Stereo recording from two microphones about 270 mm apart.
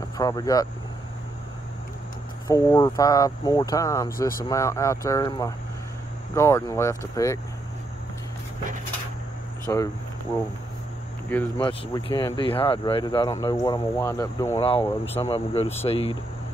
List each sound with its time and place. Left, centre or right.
0.2 s speech: centre
2.4 s speech: centre
9.7 s speech: centre
11.2 s speech: centre